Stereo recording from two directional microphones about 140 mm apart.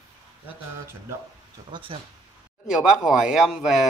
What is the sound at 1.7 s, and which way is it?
Speech, 40° right (ahead or behind).